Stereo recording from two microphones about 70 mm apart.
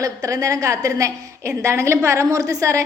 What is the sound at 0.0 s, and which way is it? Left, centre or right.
A woman's voice, right.